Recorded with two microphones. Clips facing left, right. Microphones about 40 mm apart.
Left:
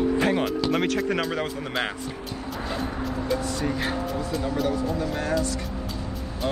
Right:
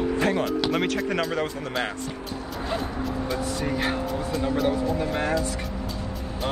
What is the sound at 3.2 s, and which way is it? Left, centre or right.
Speech, centre.